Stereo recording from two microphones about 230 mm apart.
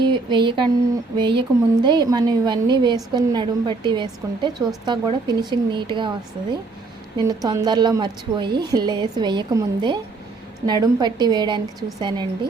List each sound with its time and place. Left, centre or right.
0.0 s a sound: right
1.2 s a woman's voice: right
7.2 s a woman's voice: centre